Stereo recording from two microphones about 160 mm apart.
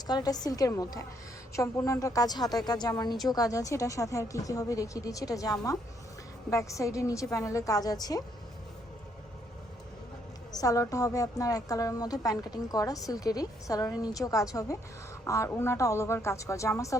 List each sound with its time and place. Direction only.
0.1 s a woman's voice: 25° left (ahead or behind)
10.5 s a woman's voice: 20° left (ahead or behind)